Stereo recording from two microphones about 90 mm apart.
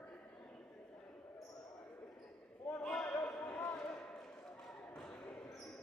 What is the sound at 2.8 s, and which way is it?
Basketball bounce, 10° left (ahead or behind).